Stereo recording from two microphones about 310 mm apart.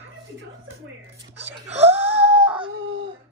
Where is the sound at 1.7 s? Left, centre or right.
Centre.